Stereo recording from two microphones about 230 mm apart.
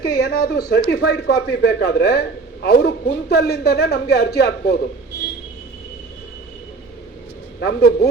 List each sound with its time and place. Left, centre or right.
0.0 s speech: left
7.6 s speech: left